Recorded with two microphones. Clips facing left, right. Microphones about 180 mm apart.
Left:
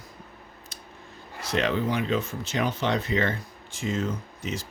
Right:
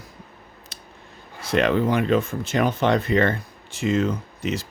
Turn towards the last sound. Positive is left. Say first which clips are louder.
# right 6 dB
turn(degrees=-70)  # may be behind; listen again after turning